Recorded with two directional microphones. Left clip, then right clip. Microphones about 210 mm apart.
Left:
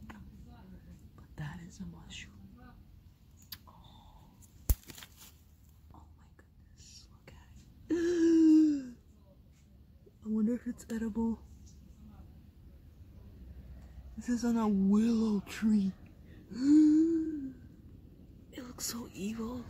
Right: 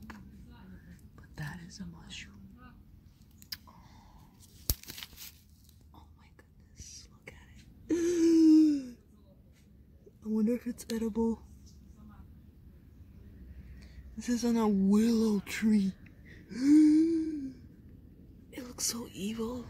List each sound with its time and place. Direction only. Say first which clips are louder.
1.1 s whispering: right 3 dB; 5° right (ahead or behind)
7.8 s gasp: right 1 dB; 10° right (ahead or behind)
10.2 s speech: right 3 dB; 15° right (ahead or behind)
14.2 s speech: right 3 dB; 10° right (ahead or behind)
18.5 s speech: right 5 dB; 15° right (ahead or behind)